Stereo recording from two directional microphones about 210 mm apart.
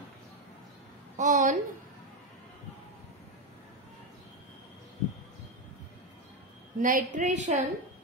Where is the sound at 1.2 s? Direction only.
35° right (ahead or behind).